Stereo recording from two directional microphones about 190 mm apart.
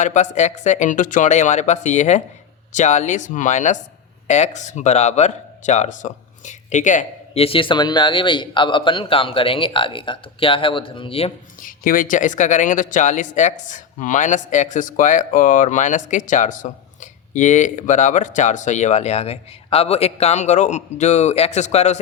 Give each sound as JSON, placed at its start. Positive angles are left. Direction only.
{"t": 0.0, "sound": "speech", "side_deg": 40}
{"t": 11.6, "sound": "speech", "side_deg": 45}